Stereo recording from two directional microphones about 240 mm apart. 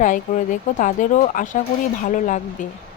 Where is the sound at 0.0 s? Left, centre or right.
Left.